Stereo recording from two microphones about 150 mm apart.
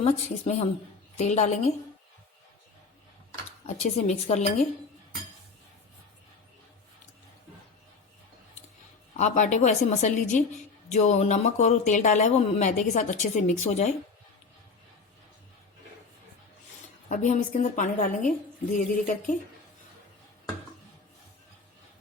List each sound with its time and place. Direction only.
0.0 s speech: 45° left (ahead or behind)
3.7 s speech: 45° left (ahead or behind)
9.1 s speech: 50° left (ahead or behind)
17.1 s a woman's voice: 50° left (ahead or behind)